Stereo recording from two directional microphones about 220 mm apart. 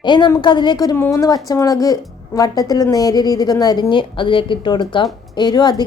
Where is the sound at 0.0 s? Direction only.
20° left (ahead or behind).